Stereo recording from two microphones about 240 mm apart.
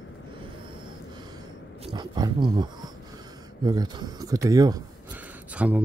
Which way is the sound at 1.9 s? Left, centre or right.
Centre.